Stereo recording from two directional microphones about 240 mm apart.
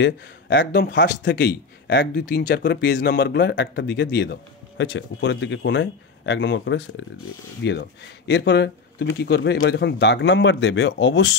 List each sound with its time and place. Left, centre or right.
0.0 s speech: left